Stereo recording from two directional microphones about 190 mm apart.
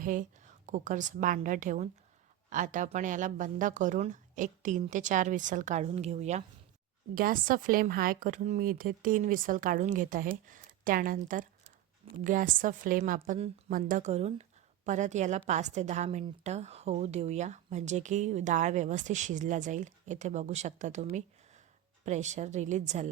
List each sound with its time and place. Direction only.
0.0 s a woman's voice: 45° right (ahead or behind)
7.2 s a woman's voice: 50° right (ahead or behind)